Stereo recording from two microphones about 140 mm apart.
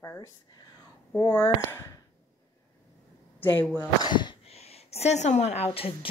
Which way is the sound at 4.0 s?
30° left (ahead or behind).